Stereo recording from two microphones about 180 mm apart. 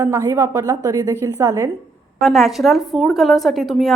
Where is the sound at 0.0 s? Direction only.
15° right (ahead or behind).